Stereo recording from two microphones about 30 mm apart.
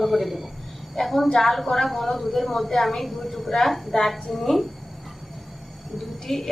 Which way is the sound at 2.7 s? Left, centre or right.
Centre.